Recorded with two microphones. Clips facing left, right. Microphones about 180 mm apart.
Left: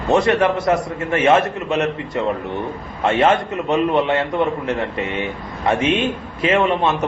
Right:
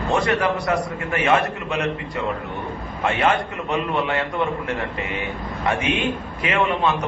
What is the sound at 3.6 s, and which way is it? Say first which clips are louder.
A man's voice: left 6 dB; 20° left (ahead or behind).